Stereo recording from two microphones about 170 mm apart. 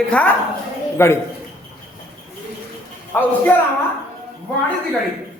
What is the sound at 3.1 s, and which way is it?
Speech, 10° left (ahead or behind).